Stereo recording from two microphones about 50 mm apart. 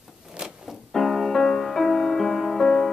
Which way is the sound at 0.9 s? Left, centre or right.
Centre.